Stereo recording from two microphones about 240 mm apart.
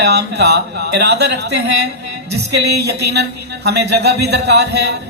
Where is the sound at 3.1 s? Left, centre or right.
Right.